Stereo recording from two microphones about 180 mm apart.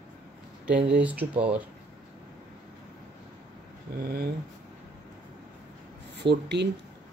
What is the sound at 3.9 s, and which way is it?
Speech, 55° right (ahead or behind).